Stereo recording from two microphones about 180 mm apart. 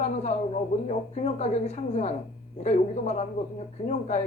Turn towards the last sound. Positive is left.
turn(degrees=40)  # may be behind; listen again after turning